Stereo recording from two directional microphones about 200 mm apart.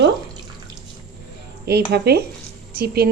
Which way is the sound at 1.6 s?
55° right (ahead or behind).